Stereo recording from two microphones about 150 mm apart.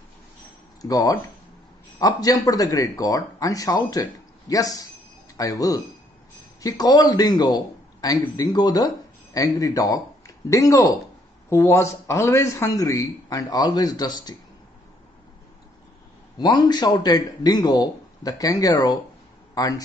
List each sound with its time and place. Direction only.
0.8 s speech: 25° left (ahead or behind)
16.3 s speech: 25° left (ahead or behind)